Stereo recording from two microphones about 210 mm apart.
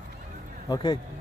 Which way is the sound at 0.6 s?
20° left (ahead or behind).